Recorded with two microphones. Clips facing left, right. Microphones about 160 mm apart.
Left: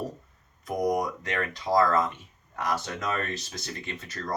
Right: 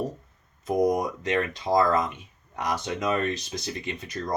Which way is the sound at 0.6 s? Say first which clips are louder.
Right 3 dB; 25° right (ahead or behind).